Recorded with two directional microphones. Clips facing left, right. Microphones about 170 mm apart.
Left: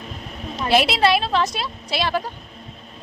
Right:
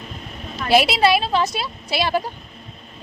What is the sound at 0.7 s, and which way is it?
A woman's voice, 5° right (ahead or behind).